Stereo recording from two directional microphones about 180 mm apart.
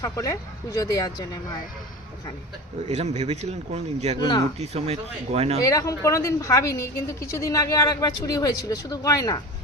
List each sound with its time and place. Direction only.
0.0 s speech: 20° left (ahead or behind)
2.8 s a man's voice: 35° right (ahead or behind)
5.6 s a woman's voice: 20° left (ahead or behind)